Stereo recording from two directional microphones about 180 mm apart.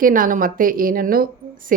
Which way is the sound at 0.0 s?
50° right (ahead or behind).